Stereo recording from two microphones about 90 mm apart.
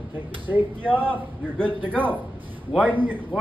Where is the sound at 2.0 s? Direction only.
20° right (ahead or behind).